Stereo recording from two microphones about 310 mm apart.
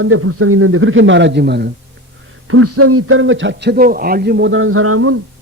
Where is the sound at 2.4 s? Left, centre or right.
Right.